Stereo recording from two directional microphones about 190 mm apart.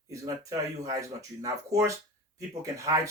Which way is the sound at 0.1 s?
15° right (ahead or behind).